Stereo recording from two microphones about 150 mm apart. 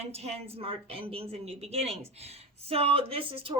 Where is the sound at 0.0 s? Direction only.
45° right (ahead or behind).